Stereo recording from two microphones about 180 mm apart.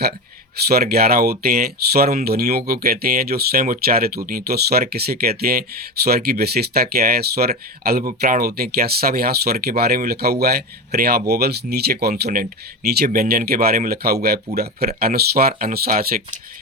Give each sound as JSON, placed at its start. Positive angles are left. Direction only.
{"t": 0.7, "sound": "speech", "side_deg": -60}